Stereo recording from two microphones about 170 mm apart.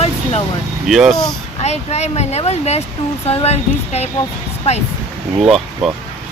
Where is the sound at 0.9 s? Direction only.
Centre (ahead or behind).